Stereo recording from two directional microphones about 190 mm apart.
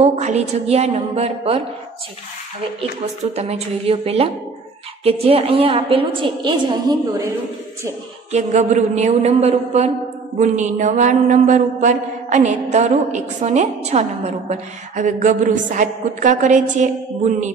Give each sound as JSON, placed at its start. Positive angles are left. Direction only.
{"t": 0.0, "sound": "a woman's voice", "side_deg": -35}
{"t": 3.3, "sound": "a woman's voice", "side_deg": -35}
{"t": 8.3, "sound": "a woman's voice", "side_deg": -35}